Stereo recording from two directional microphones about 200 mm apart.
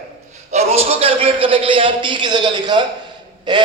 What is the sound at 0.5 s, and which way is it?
A man's voice, 30° right (ahead or behind).